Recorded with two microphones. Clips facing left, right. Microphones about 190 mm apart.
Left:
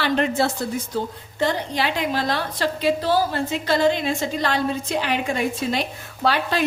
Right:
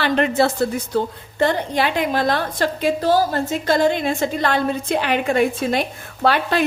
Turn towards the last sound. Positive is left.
turn(degrees=-55)  # may be behind; listen again after turning